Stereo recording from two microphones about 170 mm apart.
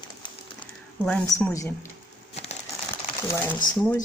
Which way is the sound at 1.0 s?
5° left (ahead or behind).